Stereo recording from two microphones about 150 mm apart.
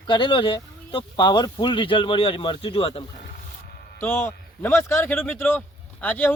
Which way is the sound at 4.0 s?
15° left (ahead or behind).